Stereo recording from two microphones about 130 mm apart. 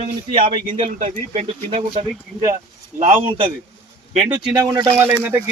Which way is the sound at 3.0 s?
40° right (ahead or behind).